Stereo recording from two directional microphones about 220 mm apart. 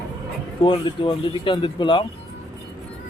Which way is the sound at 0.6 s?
20° left (ahead or behind).